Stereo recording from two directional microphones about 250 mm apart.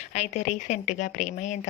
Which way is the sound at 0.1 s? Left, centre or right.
Left.